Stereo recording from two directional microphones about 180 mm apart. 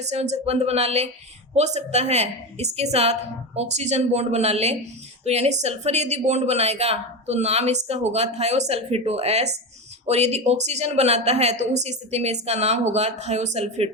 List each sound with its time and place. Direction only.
0.0 s a woman's voice: 40° right (ahead or behind)